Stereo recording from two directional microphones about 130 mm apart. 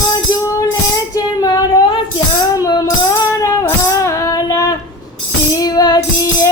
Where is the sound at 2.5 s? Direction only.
30° left (ahead or behind).